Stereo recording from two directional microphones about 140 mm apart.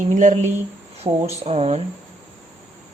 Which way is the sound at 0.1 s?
65° right (ahead or behind).